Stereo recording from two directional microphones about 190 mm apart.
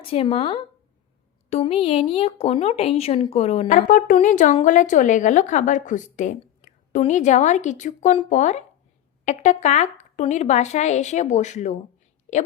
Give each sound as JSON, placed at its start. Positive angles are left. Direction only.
{"t": 0.1, "sound": "a woman's voice", "side_deg": 30}